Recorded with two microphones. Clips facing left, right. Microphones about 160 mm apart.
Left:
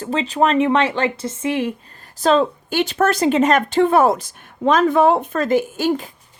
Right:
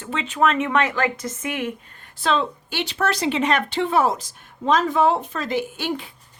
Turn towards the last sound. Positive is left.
turn(degrees=45)  # may be behind; listen again after turning